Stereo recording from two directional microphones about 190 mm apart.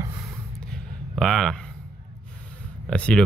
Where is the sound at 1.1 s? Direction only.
Centre (ahead or behind).